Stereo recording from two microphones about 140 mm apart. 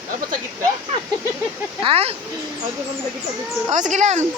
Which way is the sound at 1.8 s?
45° right (ahead or behind).